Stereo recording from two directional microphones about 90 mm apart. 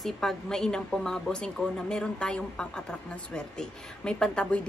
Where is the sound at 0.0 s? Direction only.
5° left (ahead or behind).